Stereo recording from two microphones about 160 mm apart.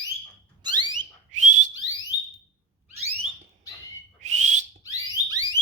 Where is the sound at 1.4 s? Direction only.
50° right (ahead or behind).